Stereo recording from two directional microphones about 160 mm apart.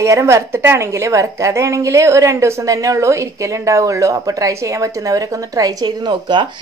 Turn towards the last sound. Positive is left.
turn(degrees=-30)  # may be behind; listen again after turning